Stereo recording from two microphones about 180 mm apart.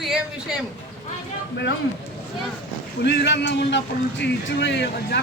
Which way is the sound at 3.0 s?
65° left (ahead or behind).